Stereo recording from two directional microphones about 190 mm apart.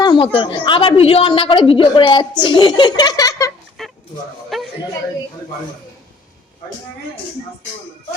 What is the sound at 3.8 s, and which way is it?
Fowl, centre (ahead or behind).